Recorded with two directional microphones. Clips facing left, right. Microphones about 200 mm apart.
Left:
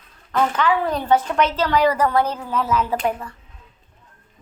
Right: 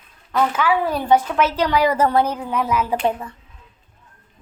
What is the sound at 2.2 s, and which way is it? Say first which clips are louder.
Speech: right 1 dB; 15° right (ahead or behind).